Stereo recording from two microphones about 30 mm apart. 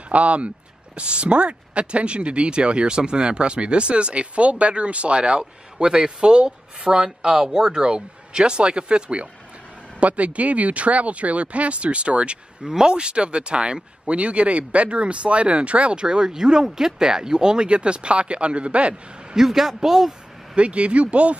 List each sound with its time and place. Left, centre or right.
0.1 s a man's voice: right; by 7.8 s centre
7.8 s speech: right
9.9 s speech: right
12.6 s speech: right
16.0 s speech: right
19.3 s a man's voice: centre
20.5 s speech: right